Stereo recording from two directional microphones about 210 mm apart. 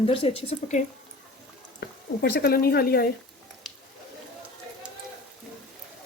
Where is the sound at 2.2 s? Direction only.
45° left (ahead or behind).